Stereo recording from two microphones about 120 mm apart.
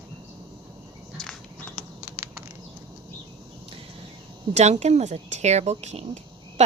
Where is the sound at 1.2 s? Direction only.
5° left (ahead or behind).